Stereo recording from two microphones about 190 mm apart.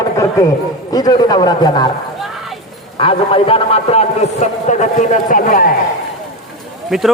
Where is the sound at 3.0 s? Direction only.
30° left (ahead or behind); by 5.7 s 45° left (ahead or behind).